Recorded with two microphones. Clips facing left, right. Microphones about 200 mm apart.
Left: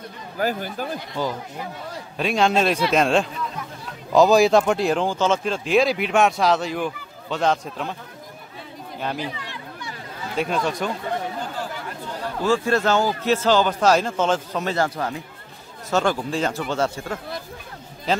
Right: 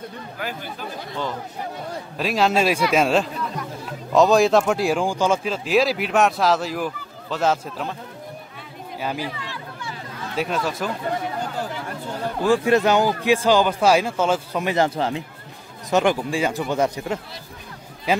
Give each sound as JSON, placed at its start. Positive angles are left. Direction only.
{"t": 0.4, "sound": "speech", "side_deg": 45}
{"t": 2.1, "sound": "speech", "side_deg": 0}
{"t": 9.0, "sound": "speech", "side_deg": -5}
{"t": 10.3, "sound": "speech", "side_deg": 0}
{"t": 12.4, "sound": "a man's voice", "side_deg": -15}
{"t": 14.9, "sound": "a man's voice", "side_deg": -25}